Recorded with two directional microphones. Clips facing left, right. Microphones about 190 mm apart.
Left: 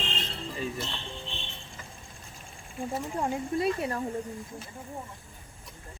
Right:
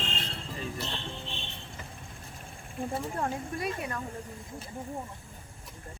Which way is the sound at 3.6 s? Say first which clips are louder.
Left 7 dB; 30° left (ahead or behind).